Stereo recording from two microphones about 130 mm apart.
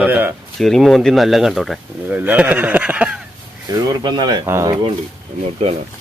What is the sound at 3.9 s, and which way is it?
Speech, 30° right (ahead or behind).